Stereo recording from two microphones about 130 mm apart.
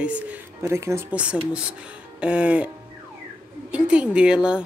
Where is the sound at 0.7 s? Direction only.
20° right (ahead or behind).